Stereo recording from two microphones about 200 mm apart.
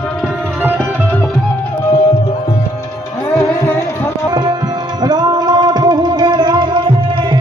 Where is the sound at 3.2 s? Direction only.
10° left (ahead or behind).